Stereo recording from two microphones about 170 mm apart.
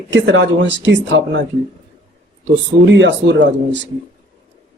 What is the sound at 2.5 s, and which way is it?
Speech, 90° right.